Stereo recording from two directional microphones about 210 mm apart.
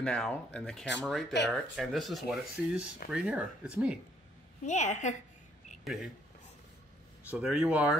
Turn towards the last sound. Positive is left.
turn(degrees=-5)  # may be behind; listen again after turning